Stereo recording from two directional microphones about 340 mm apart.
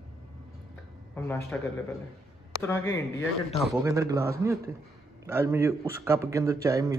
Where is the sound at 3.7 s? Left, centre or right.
Centre.